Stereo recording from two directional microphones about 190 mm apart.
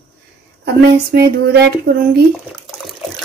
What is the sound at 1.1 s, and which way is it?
Speech, 55° right (ahead or behind).